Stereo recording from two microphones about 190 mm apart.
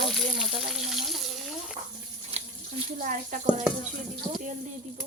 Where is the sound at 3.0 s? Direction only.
45° right (ahead or behind).